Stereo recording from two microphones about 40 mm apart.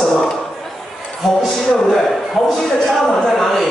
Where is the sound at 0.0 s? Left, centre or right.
Centre.